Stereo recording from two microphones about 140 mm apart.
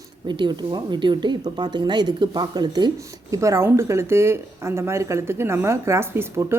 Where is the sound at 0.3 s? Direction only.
30° right (ahead or behind).